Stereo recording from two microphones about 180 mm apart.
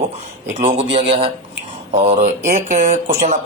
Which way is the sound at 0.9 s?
30° right (ahead or behind).